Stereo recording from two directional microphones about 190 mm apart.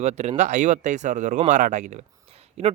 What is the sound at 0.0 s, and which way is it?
Speech, 35° right (ahead or behind).